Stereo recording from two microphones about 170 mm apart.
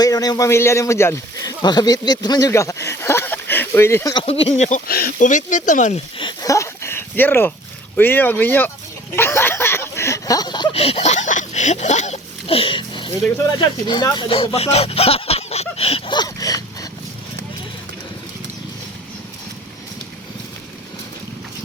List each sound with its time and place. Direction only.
0.0 s speech: 20° left (ahead or behind)
4.1 s speech: 35° left (ahead or behind)
4.9 s speech: 60° left (ahead or behind)
6.1 s a sound: 25° left (ahead or behind)
7.9 s speech: 10° left (ahead or behind)
9.1 s a sound: 15° left (ahead or behind); by 13.1 s 30° left (ahead or behind)
13.6 s speech: 25° left (ahead or behind)